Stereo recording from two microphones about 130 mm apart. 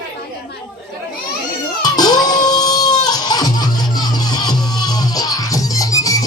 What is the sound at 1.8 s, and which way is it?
Music, 30° left (ahead or behind).